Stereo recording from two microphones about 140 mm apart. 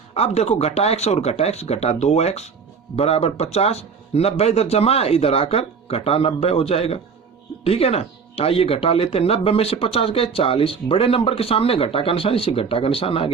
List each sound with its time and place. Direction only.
0.1 s speech: 50° left (ahead or behind)